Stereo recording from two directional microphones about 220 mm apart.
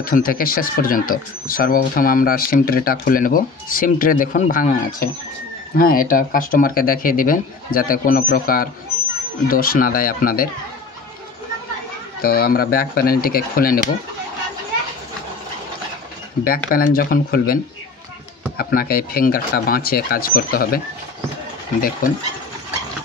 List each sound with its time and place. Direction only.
0.0 s speech: 40° left (ahead or behind)
12.2 s speech: 45° left (ahead or behind)
16.4 s speech: 40° left (ahead or behind)
18.6 s speech: 40° left (ahead or behind)
22.0 s speech: 40° left (ahead or behind)